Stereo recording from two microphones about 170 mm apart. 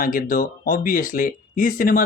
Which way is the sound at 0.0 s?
55° left (ahead or behind).